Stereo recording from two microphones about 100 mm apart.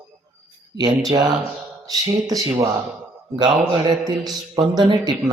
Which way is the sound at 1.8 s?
40° right (ahead or behind).